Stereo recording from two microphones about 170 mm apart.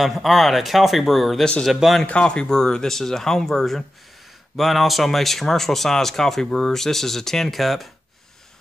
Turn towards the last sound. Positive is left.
turn(degrees=0)  # may be behind; listen again after turning